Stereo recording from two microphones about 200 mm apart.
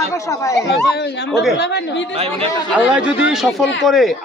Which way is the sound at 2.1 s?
30° right (ahead or behind).